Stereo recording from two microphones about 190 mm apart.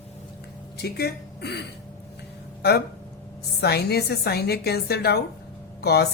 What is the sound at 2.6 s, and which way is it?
A woman's voice, 60° left (ahead or behind).